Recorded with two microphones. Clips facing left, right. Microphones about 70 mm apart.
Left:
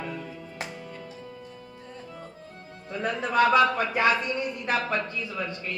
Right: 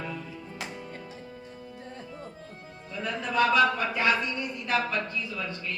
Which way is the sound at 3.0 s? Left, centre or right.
Left.